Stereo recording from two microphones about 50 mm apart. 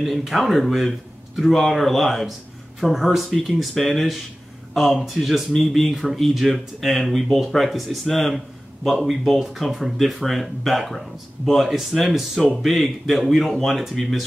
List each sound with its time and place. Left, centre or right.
0.0 s speech: centre